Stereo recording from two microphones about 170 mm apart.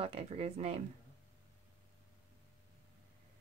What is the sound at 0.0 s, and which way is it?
Speech, 35° right (ahead or behind).